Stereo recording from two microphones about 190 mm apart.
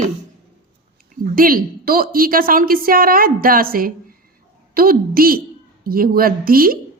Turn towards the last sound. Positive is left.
turn(degrees=-50)  # may be behind; listen again after turning